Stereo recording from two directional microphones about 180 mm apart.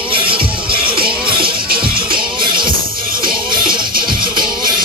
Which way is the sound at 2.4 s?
25° right (ahead or behind).